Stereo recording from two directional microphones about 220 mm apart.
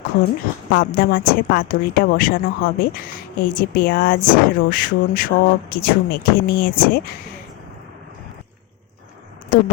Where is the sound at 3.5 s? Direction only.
40° left (ahead or behind).